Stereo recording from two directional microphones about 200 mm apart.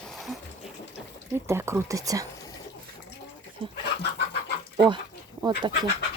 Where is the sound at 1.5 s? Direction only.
15° right (ahead or behind).